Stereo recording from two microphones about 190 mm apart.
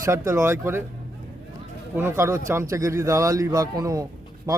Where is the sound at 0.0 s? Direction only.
15° right (ahead or behind).